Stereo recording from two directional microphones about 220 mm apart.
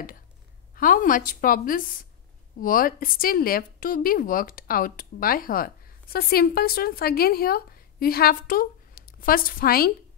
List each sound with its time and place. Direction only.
0.7 s speech: 40° left (ahead or behind)